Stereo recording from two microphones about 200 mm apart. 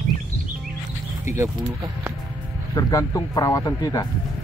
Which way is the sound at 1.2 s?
15° right (ahead or behind).